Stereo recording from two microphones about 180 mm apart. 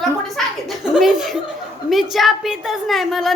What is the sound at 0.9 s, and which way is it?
Chuckle, centre (ahead or behind).